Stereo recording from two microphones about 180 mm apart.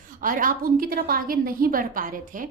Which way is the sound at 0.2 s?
50° right (ahead or behind).